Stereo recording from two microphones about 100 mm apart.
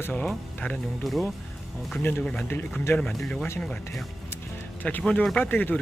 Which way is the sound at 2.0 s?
20° left (ahead or behind).